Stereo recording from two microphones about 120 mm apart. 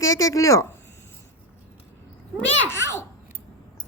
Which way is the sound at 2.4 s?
20° left (ahead or behind).